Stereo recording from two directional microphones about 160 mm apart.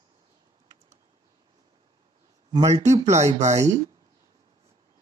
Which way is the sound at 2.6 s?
45° right (ahead or behind).